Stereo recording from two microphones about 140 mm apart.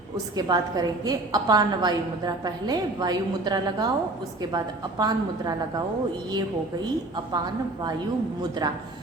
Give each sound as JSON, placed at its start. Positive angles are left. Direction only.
{"t": 0.3, "sound": "a woman's voice", "side_deg": -30}
{"t": 7.3, "sound": "a woman's voice", "side_deg": -30}